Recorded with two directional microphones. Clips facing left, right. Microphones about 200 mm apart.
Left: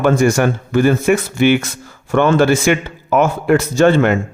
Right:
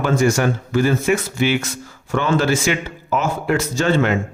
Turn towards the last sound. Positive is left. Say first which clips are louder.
# left 6 dB
turn(degrees=55)  # may be behind; listen again after turning